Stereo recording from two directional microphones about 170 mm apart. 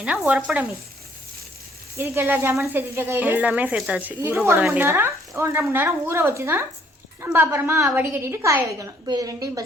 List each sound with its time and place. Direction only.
0.0 s speech: 5° right (ahead or behind)
2.0 s speech: 10° right (ahead or behind)